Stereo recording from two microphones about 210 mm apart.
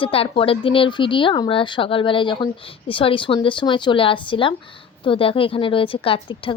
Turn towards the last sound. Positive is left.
turn(degrees=25)  # may be behind; listen again after turning